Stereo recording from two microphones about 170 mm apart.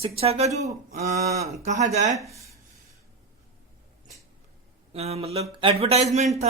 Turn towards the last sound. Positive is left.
turn(degrees=-40)  # may be behind; listen again after turning